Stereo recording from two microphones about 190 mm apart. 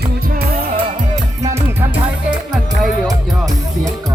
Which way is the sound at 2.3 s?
Centre (ahead or behind).